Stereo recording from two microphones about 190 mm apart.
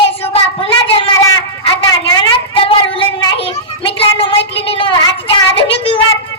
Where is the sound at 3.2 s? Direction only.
30° left (ahead or behind).